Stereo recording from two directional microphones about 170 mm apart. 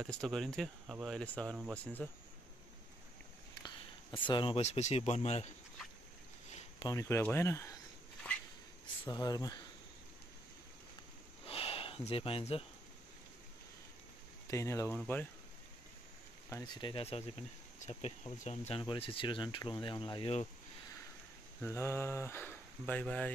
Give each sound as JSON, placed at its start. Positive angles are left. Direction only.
{"t": 0.0, "sound": "speech", "side_deg": 0}
{"t": 3.6, "sound": "a sound", "side_deg": 25}
{"t": 4.6, "sound": "speech", "side_deg": 40}
{"t": 6.8, "sound": "speech", "side_deg": 20}
{"t": 9.1, "sound": "speech", "side_deg": 20}
{"t": 11.4, "sound": "a sound", "side_deg": 35}
{"t": 14.5, "sound": "speech", "side_deg": 15}
{"t": 16.4, "sound": "speech", "side_deg": 20}
{"t": 21.5, "sound": "speech", "side_deg": 15}